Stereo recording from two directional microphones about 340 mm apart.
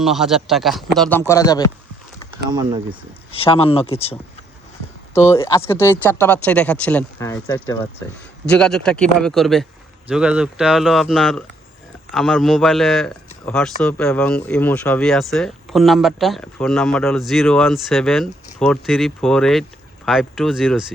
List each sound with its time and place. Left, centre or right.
0.0 s a man's voice: centre
2.5 s speech: centre
3.3 s a man's voice: centre